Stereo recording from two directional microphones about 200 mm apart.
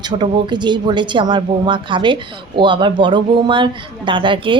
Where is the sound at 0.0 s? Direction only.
20° right (ahead or behind).